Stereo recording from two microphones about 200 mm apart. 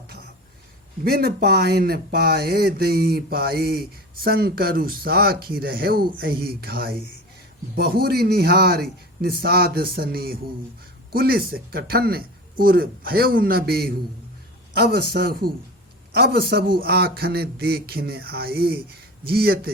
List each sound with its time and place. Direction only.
1.0 s speech: 50° right (ahead or behind)